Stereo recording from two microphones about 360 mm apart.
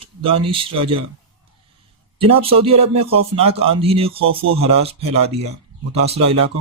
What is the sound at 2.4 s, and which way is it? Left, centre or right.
Speech, centre.